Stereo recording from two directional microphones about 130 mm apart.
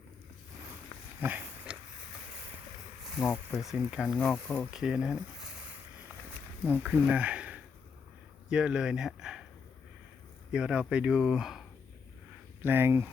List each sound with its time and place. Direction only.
1.2 s pig: 10° right (ahead or behind)
3.5 s speech: centre (ahead or behind)
6.7 s speech: 10° right (ahead or behind)
10.5 s speech: 10° right (ahead or behind)
12.6 s speech: 15° right (ahead or behind)